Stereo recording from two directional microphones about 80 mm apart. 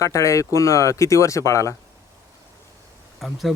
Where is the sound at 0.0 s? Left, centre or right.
Left.